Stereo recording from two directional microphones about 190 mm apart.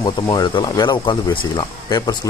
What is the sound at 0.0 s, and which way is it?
Speech, 20° left (ahead or behind).